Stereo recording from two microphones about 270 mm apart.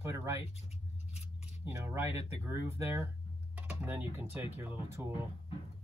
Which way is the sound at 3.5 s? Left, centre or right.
Centre.